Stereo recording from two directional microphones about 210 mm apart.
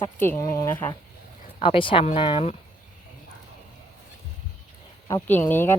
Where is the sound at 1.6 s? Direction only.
25° left (ahead or behind).